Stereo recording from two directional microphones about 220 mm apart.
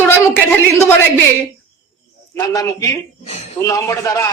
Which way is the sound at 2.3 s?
15° left (ahead or behind).